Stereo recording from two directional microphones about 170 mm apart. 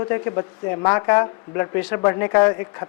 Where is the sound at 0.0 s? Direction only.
20° left (ahead or behind).